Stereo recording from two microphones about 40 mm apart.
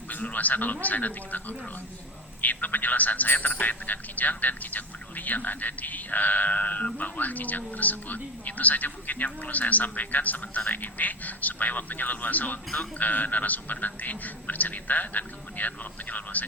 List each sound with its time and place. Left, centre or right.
0.1 s speech: left